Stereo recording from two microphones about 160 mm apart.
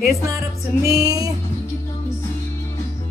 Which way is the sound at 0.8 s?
20° right (ahead or behind).